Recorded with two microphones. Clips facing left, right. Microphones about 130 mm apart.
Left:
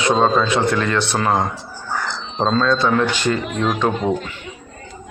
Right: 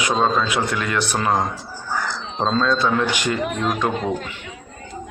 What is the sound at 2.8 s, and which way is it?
Speech, 15° right (ahead or behind).